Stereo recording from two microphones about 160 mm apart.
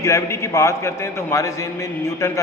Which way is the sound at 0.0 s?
20° left (ahead or behind).